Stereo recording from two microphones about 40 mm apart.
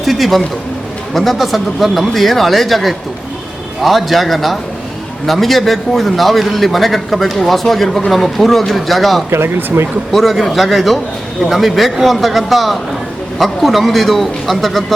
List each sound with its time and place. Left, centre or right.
0.0 s a sound: centre
1.1 s a man's voice: centre
9.3 s speech: right
10.1 s a man's voice: centre